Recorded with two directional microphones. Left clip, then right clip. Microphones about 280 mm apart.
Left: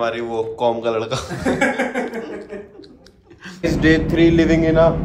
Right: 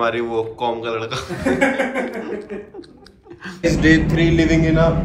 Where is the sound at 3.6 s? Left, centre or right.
Left.